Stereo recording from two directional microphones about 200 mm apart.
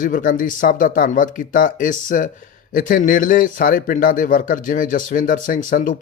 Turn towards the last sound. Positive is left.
turn(degrees=40)  # may be behind; listen again after turning